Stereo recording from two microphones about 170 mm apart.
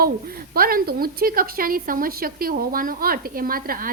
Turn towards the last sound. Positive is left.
turn(degrees=-60)  # may be behind; listen again after turning